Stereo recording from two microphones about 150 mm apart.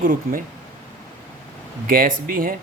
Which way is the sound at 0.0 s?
65° right (ahead or behind).